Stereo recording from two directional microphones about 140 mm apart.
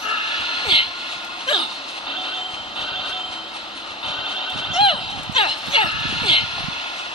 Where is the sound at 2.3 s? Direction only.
Centre (ahead or behind).